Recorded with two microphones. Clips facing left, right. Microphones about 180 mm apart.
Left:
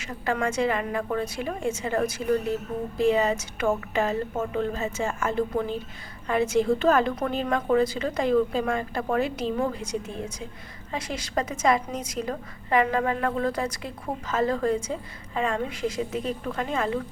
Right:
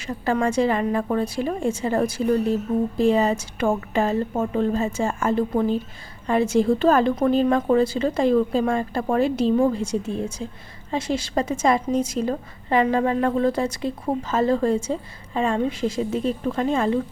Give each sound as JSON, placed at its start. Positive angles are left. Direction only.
{"t": 0.0, "sound": "a woman's voice", "side_deg": -30}